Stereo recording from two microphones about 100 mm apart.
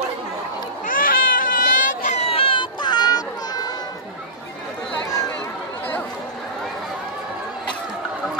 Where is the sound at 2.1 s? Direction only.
80° left; by 3.6 s 40° left (ahead or behind).